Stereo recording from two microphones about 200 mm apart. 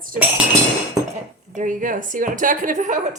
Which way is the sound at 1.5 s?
40° right (ahead or behind).